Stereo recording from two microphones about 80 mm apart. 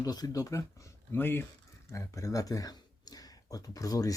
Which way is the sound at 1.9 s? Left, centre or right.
Left.